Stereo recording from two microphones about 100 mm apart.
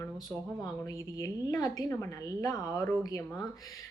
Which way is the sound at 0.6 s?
40° left (ahead or behind).